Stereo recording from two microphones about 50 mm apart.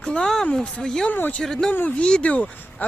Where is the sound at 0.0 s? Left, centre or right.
Centre.